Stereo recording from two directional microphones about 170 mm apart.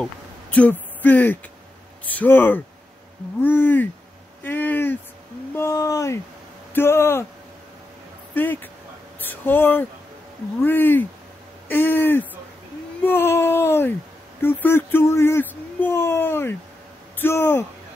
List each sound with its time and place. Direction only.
0.0 s speech: 10° left (ahead or behind)
4.4 s a sound: 10° left (ahead or behind)
6.7 s speech: 15° left (ahead or behind)
8.4 s speech: 10° left (ahead or behind)